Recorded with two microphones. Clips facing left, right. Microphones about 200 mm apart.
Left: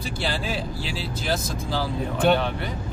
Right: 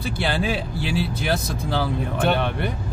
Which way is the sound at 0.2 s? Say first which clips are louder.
Right 4 dB; 60° right (ahead or behind).